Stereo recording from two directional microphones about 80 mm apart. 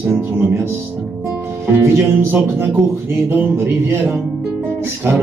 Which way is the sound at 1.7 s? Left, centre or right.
Right.